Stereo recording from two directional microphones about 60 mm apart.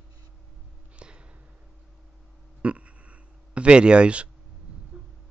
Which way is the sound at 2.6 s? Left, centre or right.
Right.